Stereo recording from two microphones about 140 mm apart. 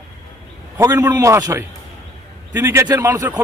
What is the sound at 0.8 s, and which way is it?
A man's voice, 25° right (ahead or behind).